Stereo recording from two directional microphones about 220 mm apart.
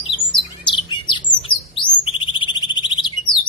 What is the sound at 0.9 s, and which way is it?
Bird, 20° left (ahead or behind).